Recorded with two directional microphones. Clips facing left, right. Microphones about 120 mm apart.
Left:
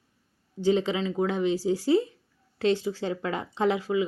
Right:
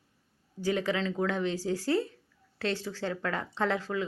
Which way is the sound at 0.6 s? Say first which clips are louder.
Left 5 dB; 20° left (ahead or behind).